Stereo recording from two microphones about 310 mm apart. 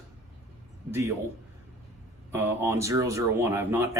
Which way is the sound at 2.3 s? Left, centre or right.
Centre.